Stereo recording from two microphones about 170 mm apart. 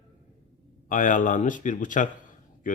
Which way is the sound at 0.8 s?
50° left (ahead or behind).